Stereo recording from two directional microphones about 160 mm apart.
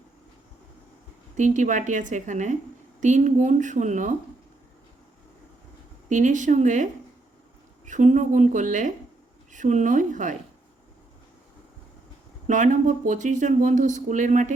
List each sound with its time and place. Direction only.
1.4 s speech: 50° right (ahead or behind)
6.1 s speech: 50° right (ahead or behind)
7.9 s speech: 50° right (ahead or behind)
12.5 s speech: 50° right (ahead or behind)